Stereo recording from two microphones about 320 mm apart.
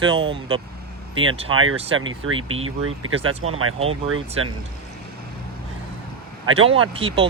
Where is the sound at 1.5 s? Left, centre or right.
Right.